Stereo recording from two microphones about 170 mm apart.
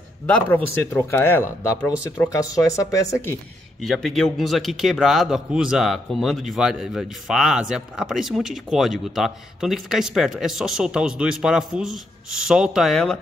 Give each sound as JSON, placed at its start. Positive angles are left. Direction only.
{"t": 0.5, "sound": "speech", "side_deg": 10}
{"t": 3.8, "sound": "a man's voice", "side_deg": 0}